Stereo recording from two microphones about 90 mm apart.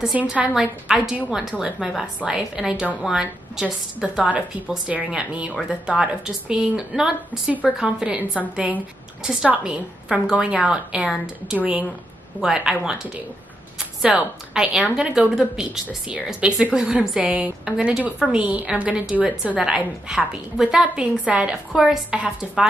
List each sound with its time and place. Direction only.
0.0 s a woman's voice: 10° right (ahead or behind)